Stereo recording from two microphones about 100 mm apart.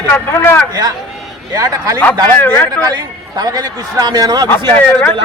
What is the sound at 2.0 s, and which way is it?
Speech, 20° left (ahead or behind).